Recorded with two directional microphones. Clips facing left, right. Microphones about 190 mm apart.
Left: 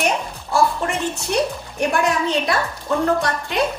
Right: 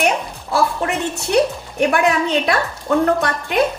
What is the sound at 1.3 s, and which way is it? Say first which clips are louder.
Speech: right 7 dB; 60° right (ahead or behind).